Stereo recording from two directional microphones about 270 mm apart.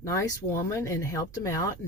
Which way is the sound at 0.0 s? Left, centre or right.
Centre.